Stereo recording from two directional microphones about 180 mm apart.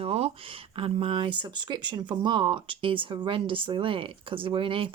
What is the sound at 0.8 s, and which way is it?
Speech, 30° right (ahead or behind).